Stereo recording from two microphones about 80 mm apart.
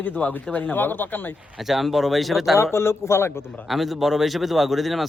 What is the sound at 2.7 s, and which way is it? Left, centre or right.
Speech, left.